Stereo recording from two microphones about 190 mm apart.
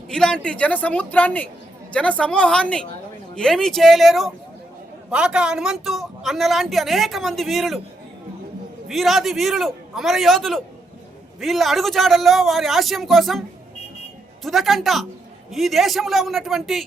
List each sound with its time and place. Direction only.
0.1 s a woman's voice: 5° left (ahead or behind)
8.9 s a woman's voice: centre (ahead or behind)
14.4 s a woman's voice: centre (ahead or behind)